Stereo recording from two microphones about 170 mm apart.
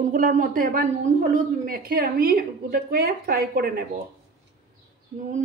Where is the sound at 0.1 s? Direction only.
55° right (ahead or behind).